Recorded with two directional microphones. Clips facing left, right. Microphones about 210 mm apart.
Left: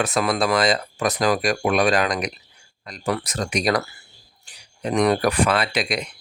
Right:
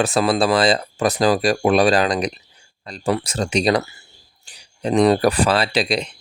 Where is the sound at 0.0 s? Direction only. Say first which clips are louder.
Right 4 dB; 30° right (ahead or behind).